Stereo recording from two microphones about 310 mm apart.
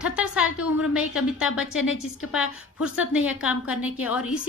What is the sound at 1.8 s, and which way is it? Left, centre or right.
Speech, left.